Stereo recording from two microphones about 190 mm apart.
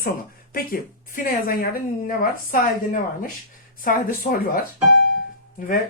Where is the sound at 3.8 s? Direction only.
45° left (ahead or behind).